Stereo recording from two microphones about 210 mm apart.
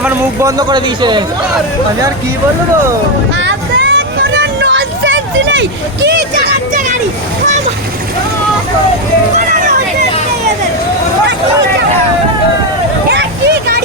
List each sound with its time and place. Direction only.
0.0 s speech: 15° right (ahead or behind)
3.4 s vehicle: 60° right (ahead or behind)